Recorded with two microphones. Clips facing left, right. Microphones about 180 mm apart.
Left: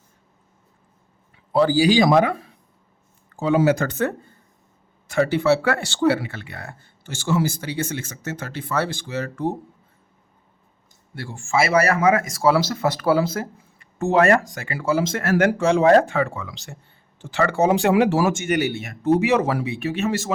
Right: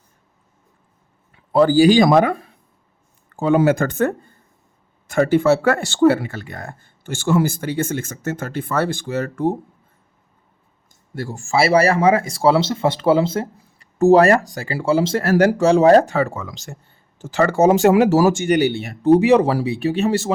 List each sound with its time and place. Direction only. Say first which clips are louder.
1.5 s speech: right 4 dB; 50° right (ahead or behind)
11.1 s speech: right 3 dB; 40° right (ahead or behind)